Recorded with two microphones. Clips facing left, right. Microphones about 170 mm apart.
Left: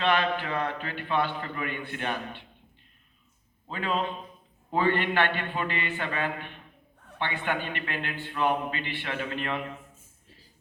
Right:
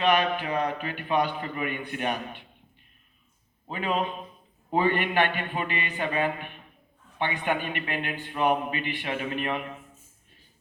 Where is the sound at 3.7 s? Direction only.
15° right (ahead or behind).